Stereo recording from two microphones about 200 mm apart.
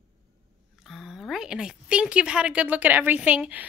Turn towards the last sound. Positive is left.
turn(degrees=-5)  # may be behind; listen again after turning